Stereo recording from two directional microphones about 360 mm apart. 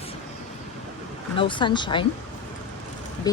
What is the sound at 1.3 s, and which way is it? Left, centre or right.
Speech, centre.